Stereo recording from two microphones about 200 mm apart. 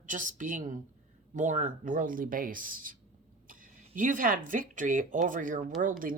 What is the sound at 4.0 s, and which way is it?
Speech, 40° right (ahead or behind).